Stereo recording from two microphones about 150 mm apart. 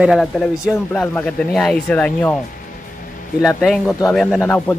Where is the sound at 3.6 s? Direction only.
5° left (ahead or behind).